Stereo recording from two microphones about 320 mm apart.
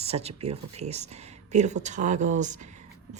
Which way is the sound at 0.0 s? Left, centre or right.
Centre.